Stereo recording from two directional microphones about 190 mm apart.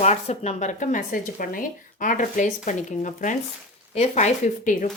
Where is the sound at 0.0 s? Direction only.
35° left (ahead or behind).